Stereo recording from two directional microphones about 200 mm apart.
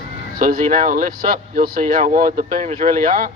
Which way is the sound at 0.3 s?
45° right (ahead or behind).